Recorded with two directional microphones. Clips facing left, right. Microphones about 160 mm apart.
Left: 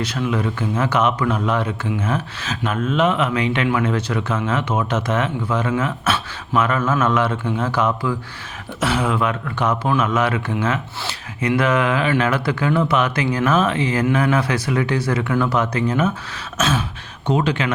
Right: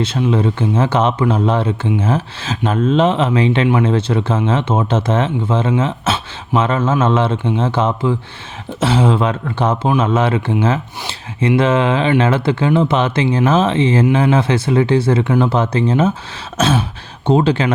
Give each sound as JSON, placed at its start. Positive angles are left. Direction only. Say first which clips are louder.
{"t": 0.0, "sound": "speech", "louder": "right 6 dB", "side_deg": -25}
{"t": 16.6, "sound": "throat clearing", "louder": "right 5 dB", "side_deg": -35}
{"t": 17.2, "sound": "speech", "louder": "right 6 dB", "side_deg": -30}